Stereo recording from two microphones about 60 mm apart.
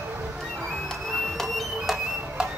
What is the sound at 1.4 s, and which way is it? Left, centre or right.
Music, centre.